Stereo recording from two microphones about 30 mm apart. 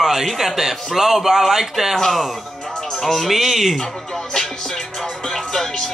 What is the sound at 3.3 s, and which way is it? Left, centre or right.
Speech, centre.